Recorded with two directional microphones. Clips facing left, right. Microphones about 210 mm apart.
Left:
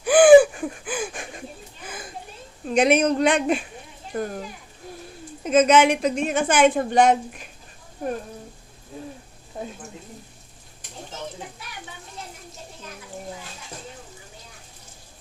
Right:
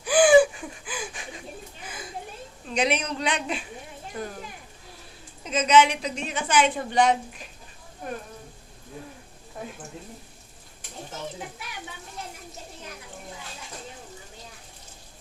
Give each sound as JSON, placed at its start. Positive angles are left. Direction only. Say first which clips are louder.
{"t": 0.0, "sound": "gasp", "louder": "left 5 dB", "side_deg": 55}
{"t": 2.6, "sound": "a woman's voice", "louder": "left 8 dB", "side_deg": 50}
{"t": 5.4, "sound": "a woman's voice", "louder": "left 4 dB", "side_deg": 50}